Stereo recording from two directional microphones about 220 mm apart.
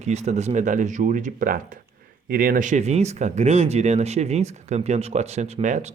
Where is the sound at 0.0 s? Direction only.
30° right (ahead or behind).